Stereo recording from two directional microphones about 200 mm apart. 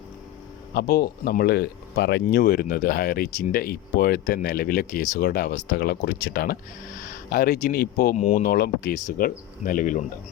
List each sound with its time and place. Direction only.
0.7 s speech: 55° left (ahead or behind)
8.1 s speech: 35° left (ahead or behind)